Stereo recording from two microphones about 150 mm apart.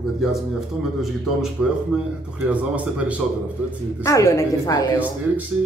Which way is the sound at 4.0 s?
20° left (ahead or behind).